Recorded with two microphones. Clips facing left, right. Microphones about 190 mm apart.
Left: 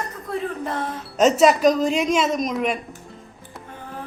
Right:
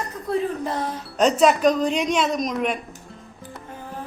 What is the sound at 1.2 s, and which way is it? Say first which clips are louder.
A woman's voice: left 2 dB; centre (ahead or behind).